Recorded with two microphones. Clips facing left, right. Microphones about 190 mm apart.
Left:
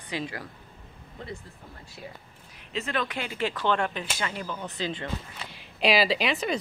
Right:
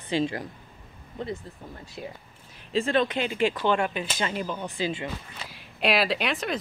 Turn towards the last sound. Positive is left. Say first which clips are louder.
# left 1 dB
turn(degrees=0)  # may be behind; listen again after turning